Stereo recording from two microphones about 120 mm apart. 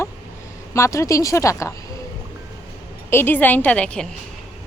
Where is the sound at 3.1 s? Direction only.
20° left (ahead or behind).